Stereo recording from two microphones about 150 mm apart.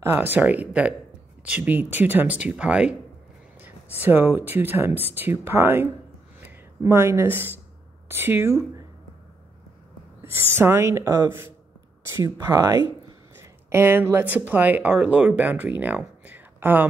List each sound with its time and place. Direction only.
0.0 s speech: 15° right (ahead or behind)
10.5 s speech: 15° right (ahead or behind)